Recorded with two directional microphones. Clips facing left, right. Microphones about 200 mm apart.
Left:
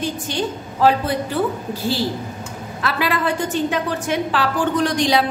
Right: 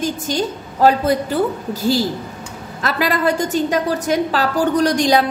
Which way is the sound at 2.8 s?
40° right (ahead or behind).